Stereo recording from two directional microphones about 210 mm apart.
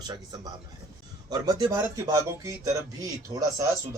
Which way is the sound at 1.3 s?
20° right (ahead or behind).